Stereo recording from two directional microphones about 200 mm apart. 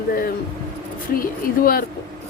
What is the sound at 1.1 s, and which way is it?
Speech, 45° left (ahead or behind).